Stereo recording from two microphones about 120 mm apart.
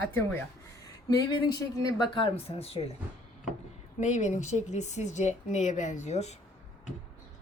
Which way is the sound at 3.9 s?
80° left.